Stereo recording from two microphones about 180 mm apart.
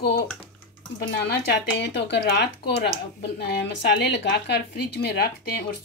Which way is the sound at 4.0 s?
70° left (ahead or behind).